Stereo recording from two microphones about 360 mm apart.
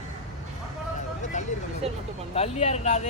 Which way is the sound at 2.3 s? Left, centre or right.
Centre.